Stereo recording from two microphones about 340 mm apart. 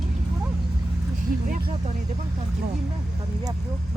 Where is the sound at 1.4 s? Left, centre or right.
Right.